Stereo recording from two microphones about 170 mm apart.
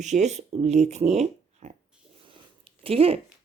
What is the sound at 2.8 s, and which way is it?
Speech, 35° right (ahead or behind).